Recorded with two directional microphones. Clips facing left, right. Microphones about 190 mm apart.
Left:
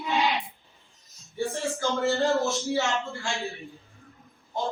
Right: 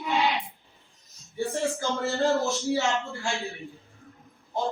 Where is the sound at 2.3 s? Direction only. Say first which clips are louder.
Even; centre (ahead or behind).